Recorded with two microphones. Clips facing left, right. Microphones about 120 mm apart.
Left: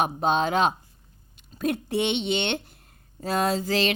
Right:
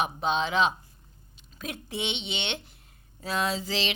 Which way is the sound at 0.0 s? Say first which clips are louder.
Left 4 dB; 45° left (ahead or behind).